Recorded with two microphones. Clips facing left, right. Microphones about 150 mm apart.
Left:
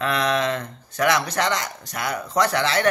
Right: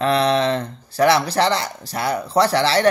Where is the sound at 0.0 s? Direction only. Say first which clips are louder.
Right 5 dB; 30° right (ahead or behind).